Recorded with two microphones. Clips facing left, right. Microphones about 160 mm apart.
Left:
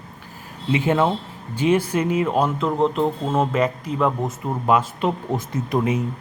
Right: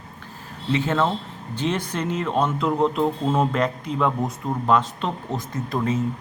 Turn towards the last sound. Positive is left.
turn(degrees=15)  # may be behind; listen again after turning